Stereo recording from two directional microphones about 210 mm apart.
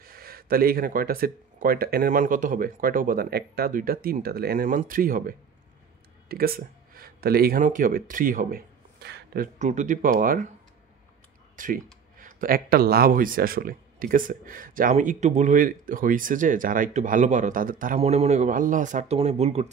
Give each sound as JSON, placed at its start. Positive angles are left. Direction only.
{"t": 0.0, "sound": "speech", "side_deg": -45}
{"t": 11.5, "sound": "speech", "side_deg": -40}